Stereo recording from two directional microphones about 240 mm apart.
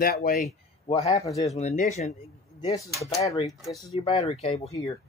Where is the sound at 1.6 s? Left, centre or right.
Left.